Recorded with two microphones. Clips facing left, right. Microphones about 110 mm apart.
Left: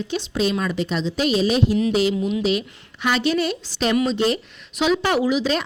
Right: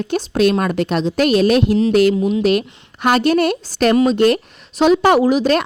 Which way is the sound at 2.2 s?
40° right (ahead or behind).